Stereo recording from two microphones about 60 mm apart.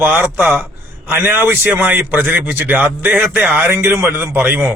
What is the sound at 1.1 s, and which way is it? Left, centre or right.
A man's voice, right.